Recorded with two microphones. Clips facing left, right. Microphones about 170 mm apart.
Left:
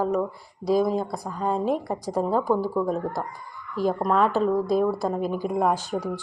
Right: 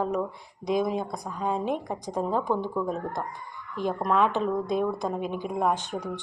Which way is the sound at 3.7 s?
35° left (ahead or behind).